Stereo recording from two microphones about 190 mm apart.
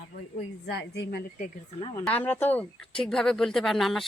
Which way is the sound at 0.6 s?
60° left (ahead or behind).